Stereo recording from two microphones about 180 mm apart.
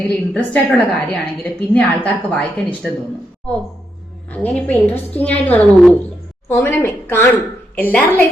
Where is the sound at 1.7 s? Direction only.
10° left (ahead or behind).